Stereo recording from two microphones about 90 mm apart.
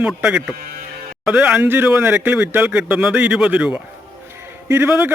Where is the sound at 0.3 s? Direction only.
10° right (ahead or behind).